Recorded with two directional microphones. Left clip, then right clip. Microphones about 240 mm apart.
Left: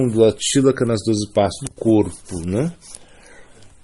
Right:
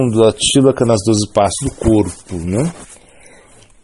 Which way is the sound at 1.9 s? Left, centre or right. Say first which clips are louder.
Right 1 dB; right.